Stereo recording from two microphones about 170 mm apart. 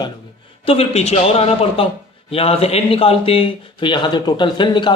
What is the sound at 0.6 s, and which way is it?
A man's voice, 35° left (ahead or behind).